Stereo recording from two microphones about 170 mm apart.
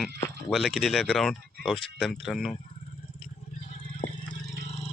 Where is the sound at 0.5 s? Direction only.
Centre (ahead or behind).